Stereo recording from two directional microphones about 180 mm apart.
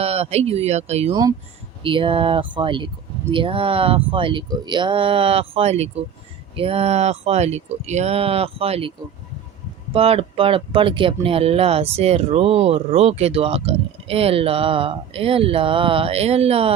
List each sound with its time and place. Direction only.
0.0 s speech: 35° right (ahead or behind)
1.1 s speech: 20° right (ahead or behind)
9.9 s speech: 30° right (ahead or behind)